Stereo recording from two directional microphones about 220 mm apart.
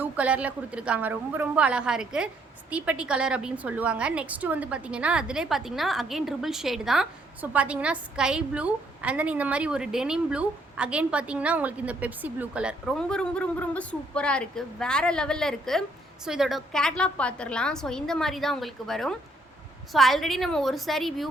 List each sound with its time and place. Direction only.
0.0 s a woman's voice: 5° right (ahead or behind)